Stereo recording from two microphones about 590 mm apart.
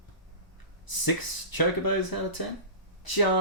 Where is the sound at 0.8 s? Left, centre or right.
Left.